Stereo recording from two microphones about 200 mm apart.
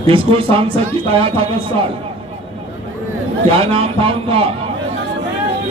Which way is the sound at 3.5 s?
25° right (ahead or behind).